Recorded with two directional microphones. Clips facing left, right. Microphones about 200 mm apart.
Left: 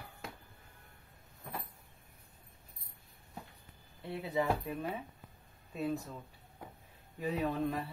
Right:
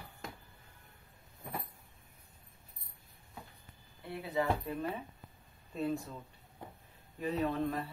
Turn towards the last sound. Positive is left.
turn(degrees=10)  # may be behind; listen again after turning